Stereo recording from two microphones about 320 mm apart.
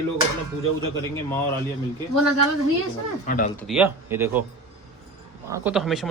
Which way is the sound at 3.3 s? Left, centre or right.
Left.